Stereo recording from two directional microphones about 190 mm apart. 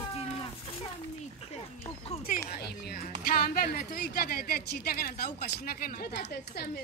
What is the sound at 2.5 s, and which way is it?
Speech, 55° left (ahead or behind).